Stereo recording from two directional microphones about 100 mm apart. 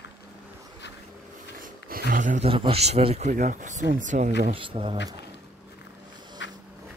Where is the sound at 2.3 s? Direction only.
65° right (ahead or behind); by 3.2 s 90° right.